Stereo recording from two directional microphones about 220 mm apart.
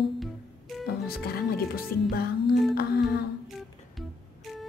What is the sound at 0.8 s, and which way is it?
Speech, 45° left (ahead or behind).